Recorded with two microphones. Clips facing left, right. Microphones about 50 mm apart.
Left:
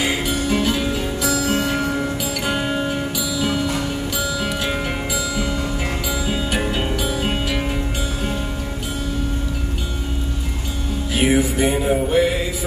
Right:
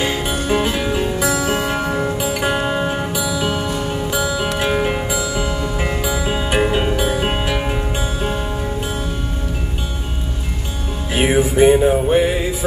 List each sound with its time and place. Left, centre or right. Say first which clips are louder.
0.3 s music: right 1 dB; right
11.1 s music: right 4 dB; right